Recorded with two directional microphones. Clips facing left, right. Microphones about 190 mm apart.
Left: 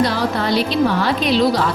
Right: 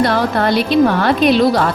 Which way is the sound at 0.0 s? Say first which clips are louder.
Right 4 dB; 55° right (ahead or behind).